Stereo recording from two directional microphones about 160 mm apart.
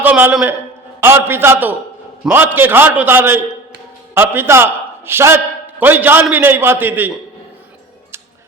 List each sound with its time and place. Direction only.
0.0 s a man's voice: 10° right (ahead or behind)